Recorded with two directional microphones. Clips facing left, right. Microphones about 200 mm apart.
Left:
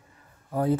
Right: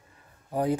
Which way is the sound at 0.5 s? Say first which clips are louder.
Left 2 dB; 15° right (ahead or behind).